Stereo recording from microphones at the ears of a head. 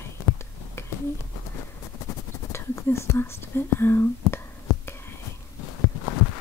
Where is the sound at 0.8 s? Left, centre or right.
Left.